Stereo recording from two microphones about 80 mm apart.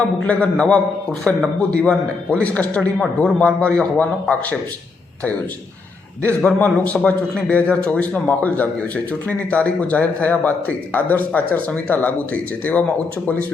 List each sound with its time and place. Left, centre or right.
0.3 s a man's voice: centre
6.6 s a man's voice: centre